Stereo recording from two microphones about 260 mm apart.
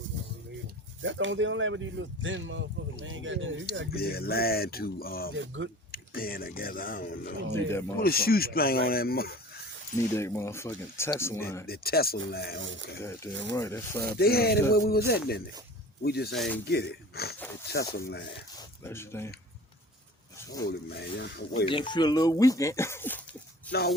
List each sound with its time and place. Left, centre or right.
1.0 s speech: right
3.9 s speech: left
5.3 s speech: right
5.9 s speech: left
10.2 s speech: centre
11.6 s speech: left
13.0 s speech: centre
14.2 s speech: left
16.3 s speech: centre
16.6 s speech: left
18.3 s speech: centre
20.7 s speech: left
21.7 s speech: centre